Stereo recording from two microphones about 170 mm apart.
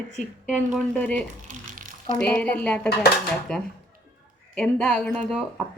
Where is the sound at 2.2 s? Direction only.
5° left (ahead or behind).